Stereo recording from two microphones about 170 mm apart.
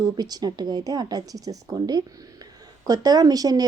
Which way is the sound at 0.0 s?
25° right (ahead or behind).